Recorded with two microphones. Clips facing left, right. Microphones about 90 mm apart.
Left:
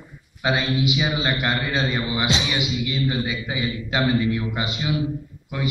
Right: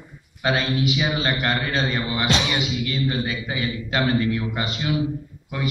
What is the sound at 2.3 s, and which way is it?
Music, 60° right (ahead or behind).